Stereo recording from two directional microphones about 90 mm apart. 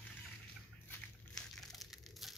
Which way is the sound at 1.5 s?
Centre (ahead or behind).